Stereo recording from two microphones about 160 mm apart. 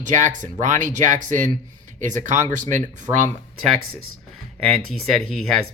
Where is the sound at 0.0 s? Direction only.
50° right (ahead or behind).